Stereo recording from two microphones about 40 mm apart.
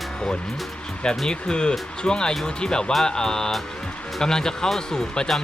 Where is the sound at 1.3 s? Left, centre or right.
Left.